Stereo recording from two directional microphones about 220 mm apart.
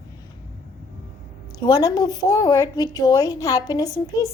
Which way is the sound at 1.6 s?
15° left (ahead or behind).